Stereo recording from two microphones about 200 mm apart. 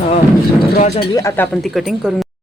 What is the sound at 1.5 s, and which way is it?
Speech, centre (ahead or behind).